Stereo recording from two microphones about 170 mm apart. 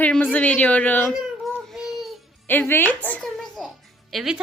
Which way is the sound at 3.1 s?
5° left (ahead or behind).